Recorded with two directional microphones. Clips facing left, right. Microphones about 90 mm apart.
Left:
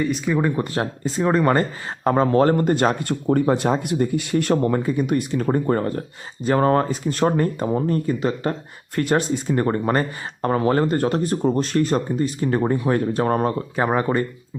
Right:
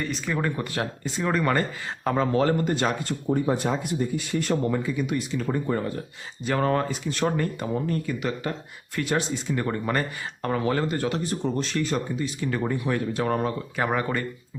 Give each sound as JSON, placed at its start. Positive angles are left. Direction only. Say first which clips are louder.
{"t": 0.0, "sound": "speech", "louder": "left 7 dB", "side_deg": 5}
{"t": 0.5, "sound": "speech", "louder": "left 5 dB", "side_deg": 30}
{"t": 3.8, "sound": "speech", "louder": "left 6 dB", "side_deg": 65}
{"t": 6.4, "sound": "speech", "louder": "left 6 dB", "side_deg": 35}
{"t": 9.0, "sound": "speech", "louder": "left 6 dB", "side_deg": 45}